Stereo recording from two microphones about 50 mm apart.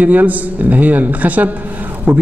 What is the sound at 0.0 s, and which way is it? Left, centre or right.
A man's voice, right.